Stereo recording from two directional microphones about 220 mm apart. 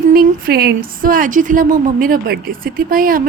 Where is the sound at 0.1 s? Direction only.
40° right (ahead or behind).